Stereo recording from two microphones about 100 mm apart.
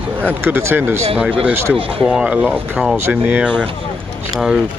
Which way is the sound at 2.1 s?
10° right (ahead or behind).